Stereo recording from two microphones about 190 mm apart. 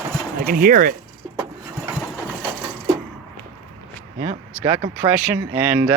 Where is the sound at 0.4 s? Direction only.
50° right (ahead or behind).